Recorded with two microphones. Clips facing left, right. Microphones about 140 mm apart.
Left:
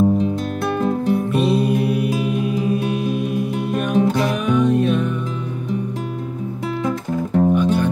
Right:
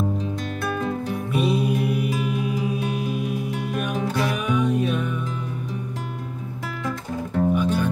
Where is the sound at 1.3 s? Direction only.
10° right (ahead or behind).